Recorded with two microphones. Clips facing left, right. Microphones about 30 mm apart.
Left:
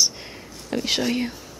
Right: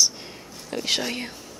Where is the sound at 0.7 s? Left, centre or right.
Centre.